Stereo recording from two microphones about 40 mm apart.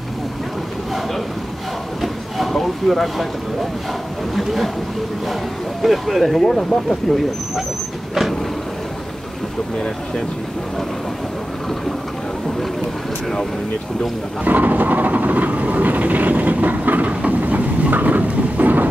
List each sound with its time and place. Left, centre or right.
2.0 s a sound: centre
4.4 s speech: centre
5.8 s speech: centre
14.4 s train: right